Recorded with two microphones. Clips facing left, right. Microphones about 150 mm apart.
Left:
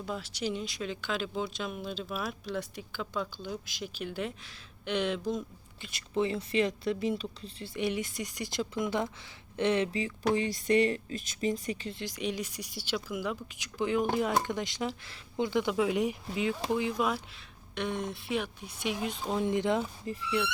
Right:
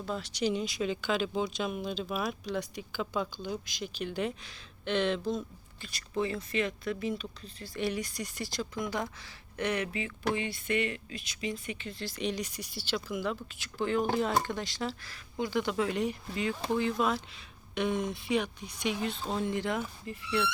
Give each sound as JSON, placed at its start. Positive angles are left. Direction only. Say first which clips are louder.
{"t": 0.0, "sound": "speech", "louder": "right 3 dB", "side_deg": 5}
{"t": 5.9, "sound": "speech", "louder": "left 2 dB", "side_deg": 25}
{"t": 11.9, "sound": "speech", "louder": "even", "side_deg": 15}
{"t": 15.7, "sound": "speech", "louder": "left 2 dB", "side_deg": 10}
{"t": 17.7, "sound": "speech", "louder": "right 3 dB", "side_deg": 0}